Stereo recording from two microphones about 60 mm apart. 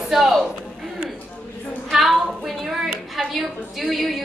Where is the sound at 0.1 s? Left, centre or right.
Centre.